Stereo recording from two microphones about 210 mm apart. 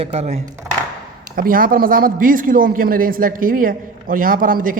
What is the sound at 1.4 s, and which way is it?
A man's voice, 40° right (ahead or behind).